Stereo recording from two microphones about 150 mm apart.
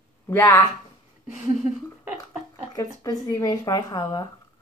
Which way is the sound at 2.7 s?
25° left (ahead or behind).